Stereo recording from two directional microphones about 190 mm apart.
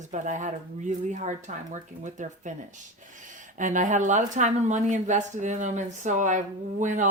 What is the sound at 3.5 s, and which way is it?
Speech, 40° right (ahead or behind).